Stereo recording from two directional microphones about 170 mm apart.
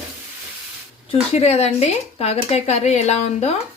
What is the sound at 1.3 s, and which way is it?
A woman's voice, 40° left (ahead or behind).